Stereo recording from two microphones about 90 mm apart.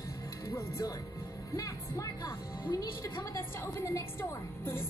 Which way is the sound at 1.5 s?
40° left (ahead or behind).